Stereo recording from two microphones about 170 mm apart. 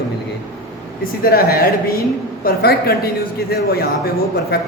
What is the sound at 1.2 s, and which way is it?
A man's voice, 65° left (ahead or behind).